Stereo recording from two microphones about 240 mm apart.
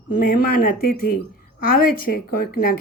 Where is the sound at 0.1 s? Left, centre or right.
Left.